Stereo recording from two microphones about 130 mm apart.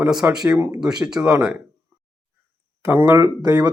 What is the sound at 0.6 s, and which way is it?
Speech, 20° right (ahead or behind).